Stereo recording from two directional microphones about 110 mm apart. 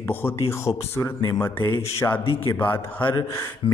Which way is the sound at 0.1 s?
20° left (ahead or behind).